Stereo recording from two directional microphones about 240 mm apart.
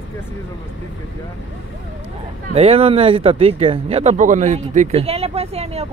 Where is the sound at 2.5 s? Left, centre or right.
Right.